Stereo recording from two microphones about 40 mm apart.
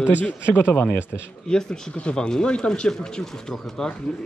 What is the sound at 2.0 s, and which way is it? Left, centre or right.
Speech, left.